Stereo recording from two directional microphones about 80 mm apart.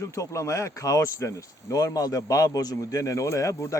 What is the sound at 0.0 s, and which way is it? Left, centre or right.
A man's voice, left.